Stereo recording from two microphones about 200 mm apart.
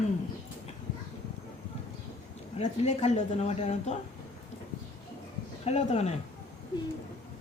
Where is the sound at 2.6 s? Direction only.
35° left (ahead or behind).